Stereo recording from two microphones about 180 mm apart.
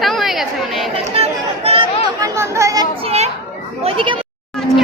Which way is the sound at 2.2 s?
15° right (ahead or behind).